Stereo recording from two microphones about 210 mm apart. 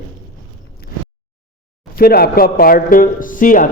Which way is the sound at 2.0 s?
45° left (ahead or behind).